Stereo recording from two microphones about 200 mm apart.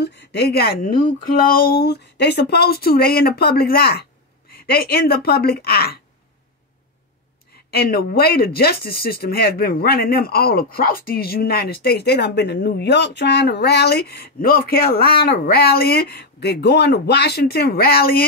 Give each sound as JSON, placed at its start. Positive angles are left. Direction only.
{"t": 0.0, "sound": "speech", "side_deg": 60}
{"t": 7.7, "sound": "speech", "side_deg": 50}